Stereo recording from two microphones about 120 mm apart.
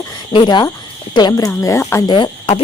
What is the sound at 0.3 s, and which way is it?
Speech, 40° left (ahead or behind).